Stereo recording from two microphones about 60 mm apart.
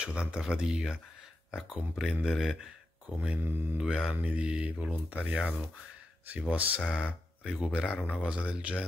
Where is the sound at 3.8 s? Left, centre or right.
Centre.